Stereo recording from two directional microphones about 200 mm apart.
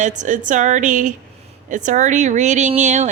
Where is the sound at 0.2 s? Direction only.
40° right (ahead or behind).